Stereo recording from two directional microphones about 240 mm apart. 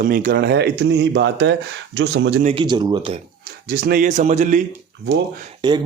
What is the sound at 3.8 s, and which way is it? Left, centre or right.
Speech, right.